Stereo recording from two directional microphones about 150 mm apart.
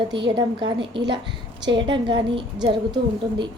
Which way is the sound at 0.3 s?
30° right (ahead or behind).